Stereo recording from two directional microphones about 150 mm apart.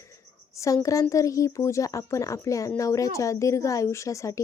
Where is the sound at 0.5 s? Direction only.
20° left (ahead or behind).